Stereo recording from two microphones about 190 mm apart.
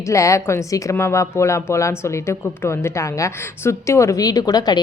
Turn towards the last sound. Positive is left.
turn(degrees=20)  # may be behind; listen again after turning